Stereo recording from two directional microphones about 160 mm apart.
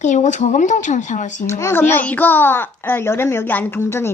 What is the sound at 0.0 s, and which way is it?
Speech, 50° left (ahead or behind).